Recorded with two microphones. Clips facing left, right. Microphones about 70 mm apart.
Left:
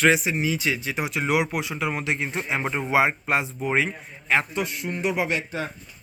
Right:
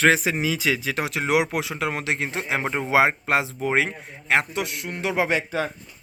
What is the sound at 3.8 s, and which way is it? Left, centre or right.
A man's voice, right.